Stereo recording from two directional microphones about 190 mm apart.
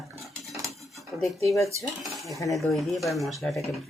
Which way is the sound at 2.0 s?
Centre (ahead or behind).